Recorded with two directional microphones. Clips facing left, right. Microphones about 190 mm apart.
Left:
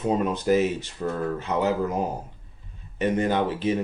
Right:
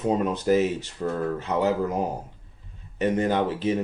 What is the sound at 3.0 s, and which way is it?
Speech, 40° right (ahead or behind).